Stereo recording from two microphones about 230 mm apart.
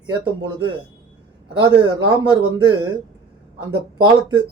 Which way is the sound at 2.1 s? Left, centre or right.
Centre.